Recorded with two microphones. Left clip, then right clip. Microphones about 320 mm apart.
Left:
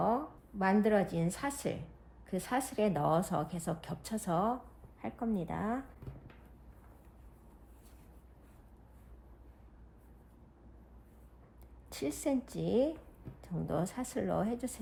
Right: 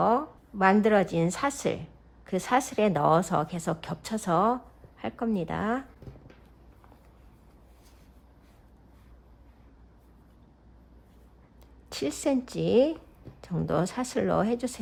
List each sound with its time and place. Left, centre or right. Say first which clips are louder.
0.6 s speech: right 8 dB; right
11.9 s speech: right 7 dB; right